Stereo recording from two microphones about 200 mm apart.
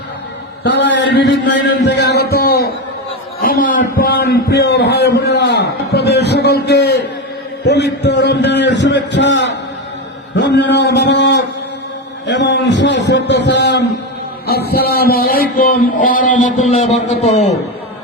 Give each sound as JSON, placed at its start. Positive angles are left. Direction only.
{"t": 0.6, "sound": "a man's voice", "side_deg": 65}